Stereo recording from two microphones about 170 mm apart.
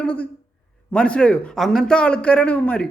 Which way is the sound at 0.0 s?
5° left (ahead or behind).